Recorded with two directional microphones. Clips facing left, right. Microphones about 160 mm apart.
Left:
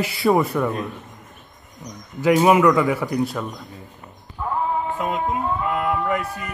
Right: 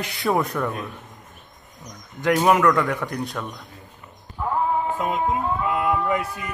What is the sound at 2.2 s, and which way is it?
A man's voice, 5° left (ahead or behind).